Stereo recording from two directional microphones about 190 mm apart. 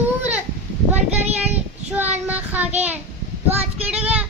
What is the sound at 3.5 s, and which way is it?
Child singing, 5° right (ahead or behind).